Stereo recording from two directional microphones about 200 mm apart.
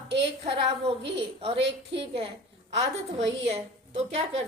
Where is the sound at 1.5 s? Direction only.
60° right (ahead or behind).